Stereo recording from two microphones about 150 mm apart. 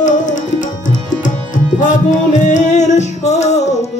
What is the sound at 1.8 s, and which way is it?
Music, 55° left (ahead or behind).